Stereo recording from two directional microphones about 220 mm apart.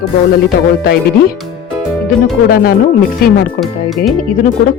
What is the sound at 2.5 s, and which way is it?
Speech, 40° left (ahead or behind).